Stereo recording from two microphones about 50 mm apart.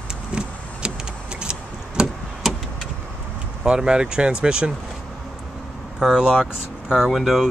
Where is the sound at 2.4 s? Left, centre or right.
Centre.